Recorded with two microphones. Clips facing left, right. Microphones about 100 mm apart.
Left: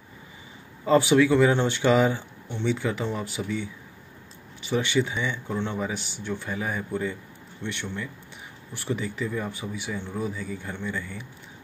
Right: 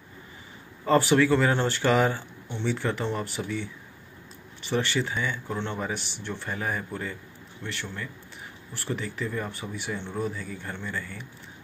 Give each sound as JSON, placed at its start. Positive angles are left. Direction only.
{"t": 0.8, "sound": "speech", "side_deg": 10}
{"t": 4.6, "sound": "speech", "side_deg": 10}
{"t": 7.6, "sound": "speech", "side_deg": 20}